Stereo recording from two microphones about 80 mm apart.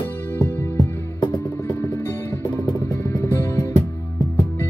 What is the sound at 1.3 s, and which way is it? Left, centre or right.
Music, left.